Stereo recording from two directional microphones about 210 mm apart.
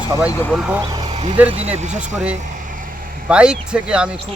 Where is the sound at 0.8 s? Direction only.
20° right (ahead or behind).